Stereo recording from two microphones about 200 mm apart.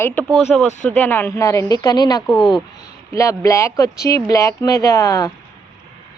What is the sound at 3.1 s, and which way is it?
Speech, 15° left (ahead or behind).